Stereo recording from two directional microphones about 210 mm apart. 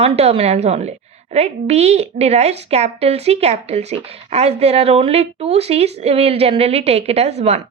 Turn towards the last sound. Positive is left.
turn(degrees=-30)  # may be behind; listen again after turning